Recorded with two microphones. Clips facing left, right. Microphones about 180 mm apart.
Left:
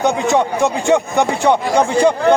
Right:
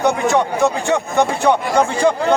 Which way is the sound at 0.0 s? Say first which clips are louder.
Left 1 dB; 20° left (ahead or behind).